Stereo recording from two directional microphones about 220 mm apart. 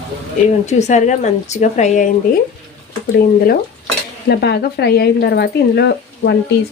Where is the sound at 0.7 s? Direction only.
30° left (ahead or behind).